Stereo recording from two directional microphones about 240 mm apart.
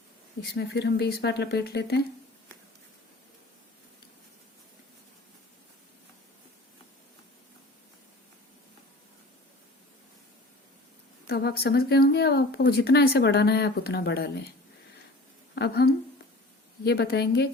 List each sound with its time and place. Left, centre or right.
0.5 s speech: left
11.3 s speech: left
15.5 s speech: left